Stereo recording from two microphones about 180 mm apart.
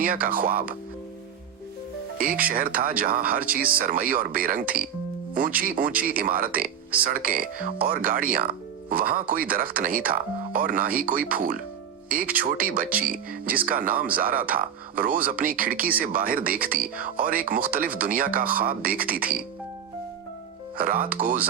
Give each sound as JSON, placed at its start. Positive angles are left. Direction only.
{"t": 0.0, "sound": "speech", "side_deg": -50}
{"t": 2.1, "sound": "speech", "side_deg": -50}
{"t": 20.7, "sound": "speech", "side_deg": -50}